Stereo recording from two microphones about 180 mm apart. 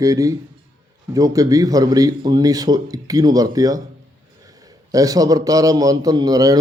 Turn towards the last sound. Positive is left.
turn(degrees=-20)  # may be behind; listen again after turning